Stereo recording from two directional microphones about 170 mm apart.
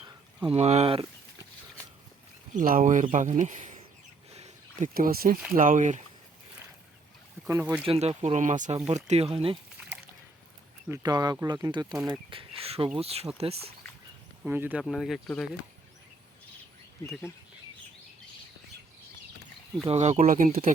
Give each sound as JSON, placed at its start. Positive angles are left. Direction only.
{"t": 0.4, "sound": "speech", "side_deg": -40}
{"t": 2.5, "sound": "speech", "side_deg": -50}
{"t": 4.3, "sound": "a sound", "side_deg": -40}
{"t": 4.9, "sound": "speech", "side_deg": -60}
{"t": 7.4, "sound": "speech", "side_deg": -15}
{"t": 7.9, "sound": "speech", "side_deg": -40}
{"t": 10.8, "sound": "speech", "side_deg": -20}
{"t": 14.4, "sound": "speech", "side_deg": -10}
{"t": 19.9, "sound": "speech", "side_deg": -40}